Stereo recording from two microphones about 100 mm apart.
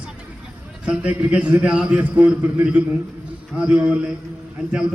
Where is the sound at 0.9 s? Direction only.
10° right (ahead or behind).